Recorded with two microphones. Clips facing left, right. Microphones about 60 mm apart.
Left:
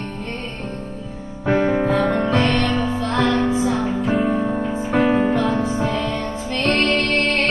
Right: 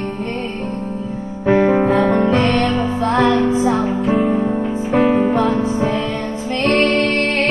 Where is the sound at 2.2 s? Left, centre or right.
Right.